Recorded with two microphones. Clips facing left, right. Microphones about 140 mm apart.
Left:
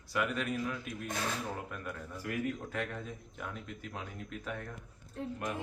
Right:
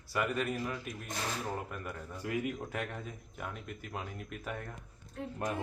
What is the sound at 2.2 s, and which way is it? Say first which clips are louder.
Speech: right 1 dB; 20° right (ahead or behind).